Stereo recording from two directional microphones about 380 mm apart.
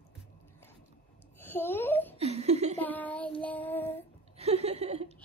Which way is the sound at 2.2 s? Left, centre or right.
Centre.